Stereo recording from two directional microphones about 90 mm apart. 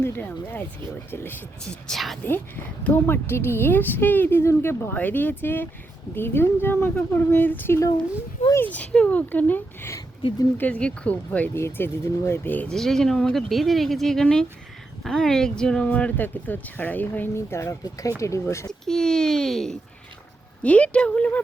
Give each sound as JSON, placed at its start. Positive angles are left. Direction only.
{"t": 0.0, "sound": "speech", "side_deg": 20}
{"t": 1.9, "sound": "speech", "side_deg": 0}
{"t": 2.8, "sound": "speech", "side_deg": 25}
{"t": 11.5, "sound": "speech", "side_deg": 30}
{"t": 12.6, "sound": "speech", "side_deg": 5}
{"t": 17.3, "sound": "speech", "side_deg": 30}
{"t": 18.7, "sound": "speech", "side_deg": 5}